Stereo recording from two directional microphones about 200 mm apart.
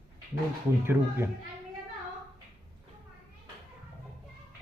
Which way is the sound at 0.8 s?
10° right (ahead or behind).